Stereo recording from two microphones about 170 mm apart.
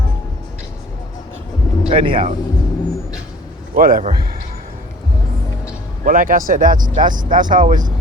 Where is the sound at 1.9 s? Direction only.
30° right (ahead or behind).